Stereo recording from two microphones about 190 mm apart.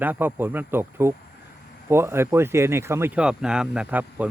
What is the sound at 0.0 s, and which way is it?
Speech, 10° right (ahead or behind).